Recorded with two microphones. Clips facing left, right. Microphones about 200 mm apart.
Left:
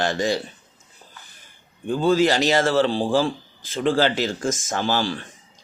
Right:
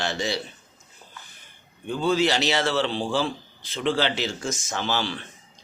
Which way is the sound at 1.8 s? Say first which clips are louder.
Left 4 dB; 45° left (ahead or behind).